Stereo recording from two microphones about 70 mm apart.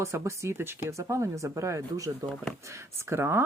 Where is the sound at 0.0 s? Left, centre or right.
Right.